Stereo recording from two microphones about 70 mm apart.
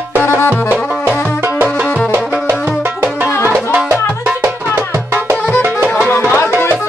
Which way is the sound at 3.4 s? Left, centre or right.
Right.